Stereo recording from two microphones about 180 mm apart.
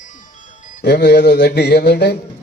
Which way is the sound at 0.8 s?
65° left (ahead or behind).